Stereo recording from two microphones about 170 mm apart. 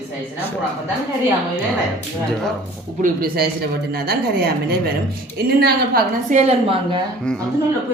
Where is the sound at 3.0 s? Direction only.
60° right (ahead or behind).